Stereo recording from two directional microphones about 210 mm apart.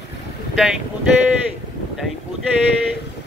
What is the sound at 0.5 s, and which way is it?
Speech, centre (ahead or behind).